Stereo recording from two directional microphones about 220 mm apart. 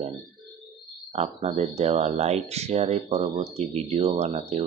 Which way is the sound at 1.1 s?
30° right (ahead or behind).